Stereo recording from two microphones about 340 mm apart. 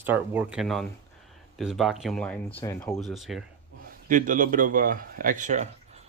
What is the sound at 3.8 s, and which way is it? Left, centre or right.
A man's voice, right.